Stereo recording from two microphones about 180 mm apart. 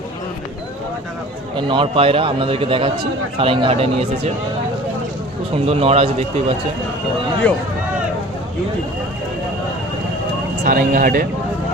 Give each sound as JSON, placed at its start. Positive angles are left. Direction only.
{"t": 1.5, "sound": "speech", "side_deg": -25}
{"t": 5.6, "sound": "a man's voice", "side_deg": -35}
{"t": 7.4, "sound": "speech", "side_deg": 5}
{"t": 10.6, "sound": "speech", "side_deg": -50}